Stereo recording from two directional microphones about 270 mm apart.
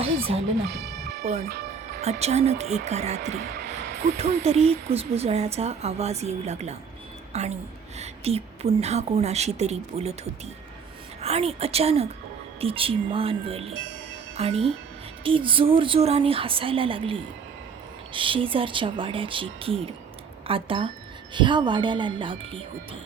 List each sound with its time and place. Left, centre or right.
1.2 s a woman's voice: right
3.3 s music: right
4.2 s a woman's voice: right
13.7 s chime: right
14.3 s a woman's voice: right